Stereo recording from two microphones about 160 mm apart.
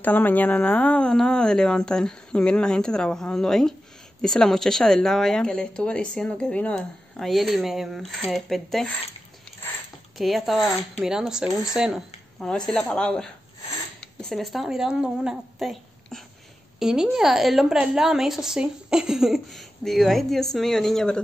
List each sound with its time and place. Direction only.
0.0 s speech: 10° left (ahead or behind)
10.1 s speech: centre (ahead or behind)
14.3 s speech: centre (ahead or behind)